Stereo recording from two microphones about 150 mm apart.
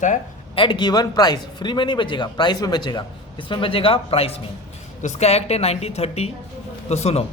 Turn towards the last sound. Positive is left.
turn(degrees=45)  # may be behind; listen again after turning